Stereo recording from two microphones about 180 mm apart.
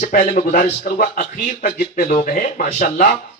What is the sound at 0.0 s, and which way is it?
A man's voice, 45° left (ahead or behind).